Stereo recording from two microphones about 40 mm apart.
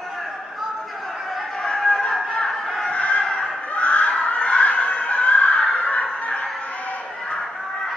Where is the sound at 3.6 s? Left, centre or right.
Left.